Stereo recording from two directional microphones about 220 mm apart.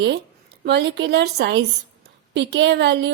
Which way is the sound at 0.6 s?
50° right (ahead or behind).